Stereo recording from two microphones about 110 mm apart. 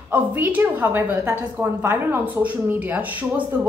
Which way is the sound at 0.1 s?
15° right (ahead or behind).